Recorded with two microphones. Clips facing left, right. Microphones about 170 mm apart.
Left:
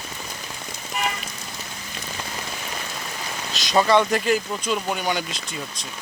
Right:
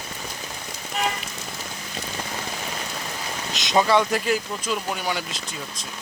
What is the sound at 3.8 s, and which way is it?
Speech, 5° right (ahead or behind).